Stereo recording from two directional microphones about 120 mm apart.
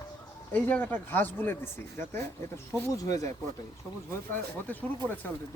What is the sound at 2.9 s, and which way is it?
Speech, 30° left (ahead or behind).